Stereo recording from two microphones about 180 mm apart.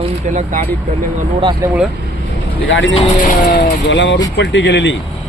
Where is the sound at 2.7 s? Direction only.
90° left.